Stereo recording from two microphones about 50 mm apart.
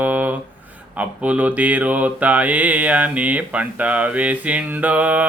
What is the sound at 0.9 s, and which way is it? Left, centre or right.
Mantra, right.